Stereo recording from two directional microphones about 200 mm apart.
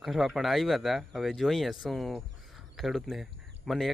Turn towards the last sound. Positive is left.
turn(degrees=0)  # may be behind; listen again after turning